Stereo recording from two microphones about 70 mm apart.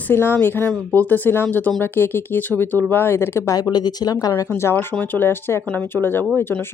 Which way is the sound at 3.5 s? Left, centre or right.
Left.